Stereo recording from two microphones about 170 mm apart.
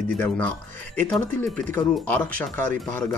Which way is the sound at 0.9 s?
10° left (ahead or behind).